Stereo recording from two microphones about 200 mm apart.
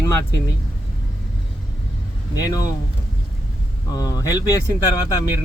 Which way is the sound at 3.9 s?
15° left (ahead or behind).